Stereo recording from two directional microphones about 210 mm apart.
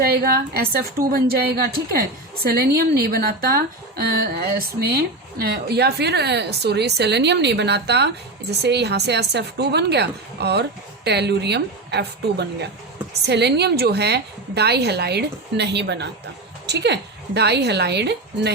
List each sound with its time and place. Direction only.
0.0 s a woman's voice: 45° right (ahead or behind)